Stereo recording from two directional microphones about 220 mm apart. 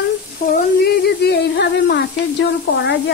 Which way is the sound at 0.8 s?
50° left (ahead or behind).